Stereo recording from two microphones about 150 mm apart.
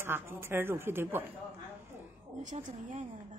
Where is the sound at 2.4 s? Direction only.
55° right (ahead or behind).